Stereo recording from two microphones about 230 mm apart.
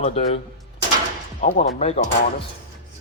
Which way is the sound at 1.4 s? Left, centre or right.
Left.